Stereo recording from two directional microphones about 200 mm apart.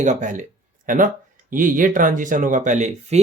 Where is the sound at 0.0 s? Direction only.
35° right (ahead or behind).